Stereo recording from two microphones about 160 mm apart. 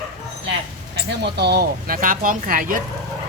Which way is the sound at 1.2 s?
90° right.